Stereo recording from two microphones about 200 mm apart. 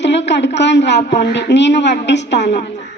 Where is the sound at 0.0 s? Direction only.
60° left (ahead or behind).